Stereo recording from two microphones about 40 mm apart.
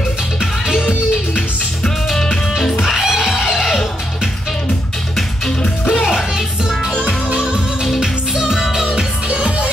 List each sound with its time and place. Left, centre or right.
0.4 s music: centre
2.8 s music: centre
5.6 s music: left
6.0 s music: centre
8.8 s music: right